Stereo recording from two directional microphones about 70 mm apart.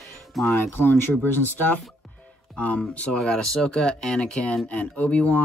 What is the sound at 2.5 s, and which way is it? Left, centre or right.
Speech, left.